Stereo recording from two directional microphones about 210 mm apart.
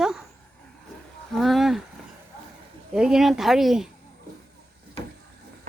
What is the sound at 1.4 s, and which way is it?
Speech, centre (ahead or behind).